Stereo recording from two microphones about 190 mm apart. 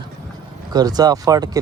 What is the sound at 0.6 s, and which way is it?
Speech, 20° right (ahead or behind).